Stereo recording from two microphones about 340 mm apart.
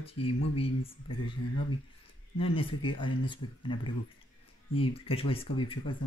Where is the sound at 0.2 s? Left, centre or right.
Left.